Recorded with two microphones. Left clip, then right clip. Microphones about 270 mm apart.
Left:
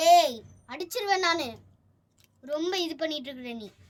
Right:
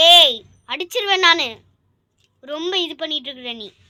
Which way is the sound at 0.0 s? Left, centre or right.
Centre.